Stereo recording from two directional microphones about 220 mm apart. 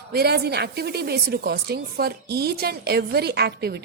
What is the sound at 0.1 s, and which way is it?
A woman's voice, 45° right (ahead or behind).